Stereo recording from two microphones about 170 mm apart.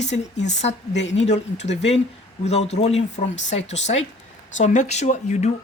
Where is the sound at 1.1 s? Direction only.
40° left (ahead or behind).